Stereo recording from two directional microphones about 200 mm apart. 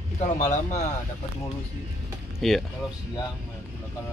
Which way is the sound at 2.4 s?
Centre (ahead or behind).